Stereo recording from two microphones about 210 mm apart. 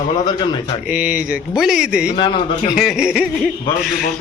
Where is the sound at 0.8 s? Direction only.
5° right (ahead or behind).